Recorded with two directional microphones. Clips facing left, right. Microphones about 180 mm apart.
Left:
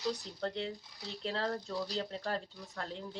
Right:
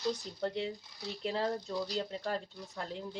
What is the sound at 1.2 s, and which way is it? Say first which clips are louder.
Speech: right 2 dB; 15° right (ahead or behind).